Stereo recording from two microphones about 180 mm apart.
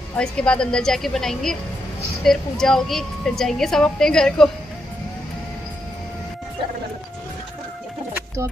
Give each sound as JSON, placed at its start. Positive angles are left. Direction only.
{"t": 0.1, "sound": "a woman's voice", "side_deg": 5}